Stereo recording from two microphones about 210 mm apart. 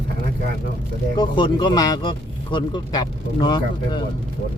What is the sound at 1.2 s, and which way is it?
Speech, 20° left (ahead or behind).